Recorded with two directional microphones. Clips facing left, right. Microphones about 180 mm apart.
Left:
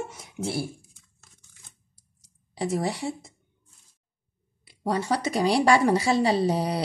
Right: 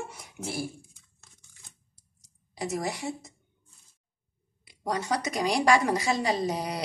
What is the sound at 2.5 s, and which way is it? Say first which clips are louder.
Speech: left 4 dB; 30° left (ahead or behind).